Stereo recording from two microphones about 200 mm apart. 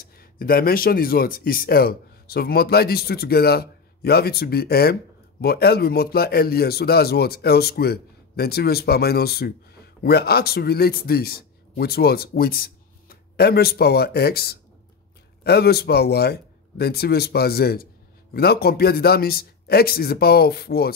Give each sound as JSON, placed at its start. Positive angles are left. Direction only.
{"t": 0.0, "sound": "a man's voice", "side_deg": 50}